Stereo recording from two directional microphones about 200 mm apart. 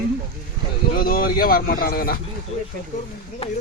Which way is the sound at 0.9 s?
45° left (ahead or behind).